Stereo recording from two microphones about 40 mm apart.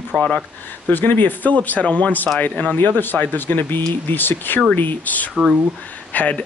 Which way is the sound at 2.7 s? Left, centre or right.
Left.